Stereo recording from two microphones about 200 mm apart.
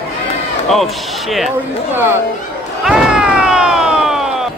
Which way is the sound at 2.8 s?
5° right (ahead or behind).